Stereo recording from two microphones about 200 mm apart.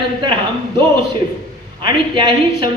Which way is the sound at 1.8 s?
25° right (ahead or behind).